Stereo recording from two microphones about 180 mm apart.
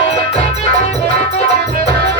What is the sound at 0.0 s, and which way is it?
Music, 35° left (ahead or behind).